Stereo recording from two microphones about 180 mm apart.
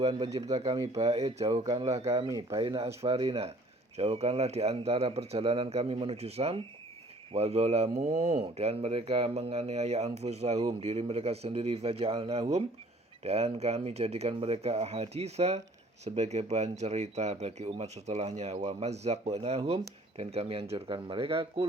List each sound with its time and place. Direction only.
0.0 s speech: 25° right (ahead or behind)
1.7 s speech: 35° right (ahead or behind)